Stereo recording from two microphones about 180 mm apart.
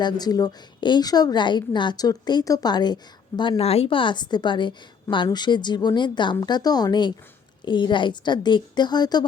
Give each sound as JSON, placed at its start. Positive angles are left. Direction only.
{"t": 0.0, "sound": "a woman's voice", "side_deg": 20}